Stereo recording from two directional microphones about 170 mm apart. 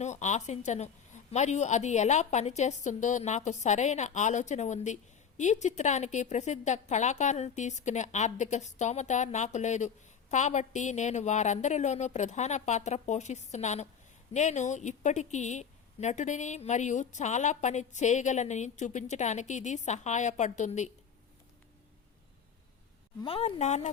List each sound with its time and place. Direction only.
0.0 s a woman's voice: 45° left (ahead or behind)
23.2 s speech: 35° left (ahead or behind)